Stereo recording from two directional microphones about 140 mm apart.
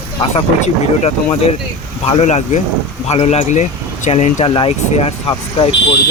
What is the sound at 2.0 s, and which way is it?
Speech, 55° left (ahead or behind).